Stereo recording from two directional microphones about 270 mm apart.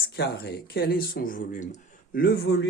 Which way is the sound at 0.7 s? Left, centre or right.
Left.